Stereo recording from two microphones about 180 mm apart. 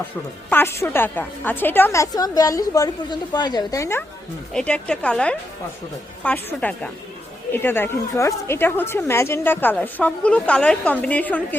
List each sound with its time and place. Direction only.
0.5 s a woman's voice: 15° left (ahead or behind)